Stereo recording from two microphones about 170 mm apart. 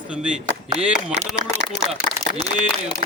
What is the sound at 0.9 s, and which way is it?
Speech, 40° right (ahead or behind).